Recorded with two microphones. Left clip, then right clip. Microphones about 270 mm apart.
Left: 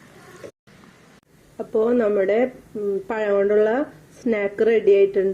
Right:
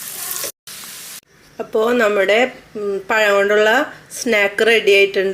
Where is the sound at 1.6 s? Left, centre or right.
Left.